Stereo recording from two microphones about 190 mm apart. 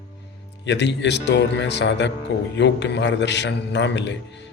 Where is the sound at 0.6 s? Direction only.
70° left (ahead or behind).